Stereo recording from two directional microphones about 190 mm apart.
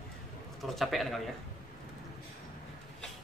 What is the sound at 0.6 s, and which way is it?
Speech, centre (ahead or behind).